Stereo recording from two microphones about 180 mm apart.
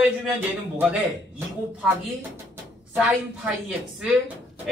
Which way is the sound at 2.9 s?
5° right (ahead or behind).